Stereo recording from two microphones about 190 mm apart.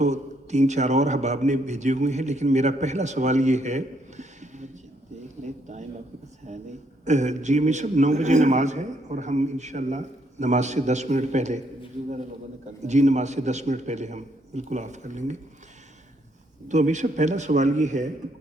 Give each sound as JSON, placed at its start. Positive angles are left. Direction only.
{"t": 0.0, "sound": "a man's voice", "side_deg": -40}
{"t": 6.5, "sound": "a sound", "side_deg": -35}
{"t": 7.0, "sound": "a man's voice", "side_deg": -40}
{"t": 12.8, "sound": "a man's voice", "side_deg": -35}
{"t": 16.6, "sound": "a man's voice", "side_deg": -40}